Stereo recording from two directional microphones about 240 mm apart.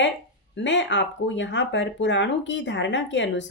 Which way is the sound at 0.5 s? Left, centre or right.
Left.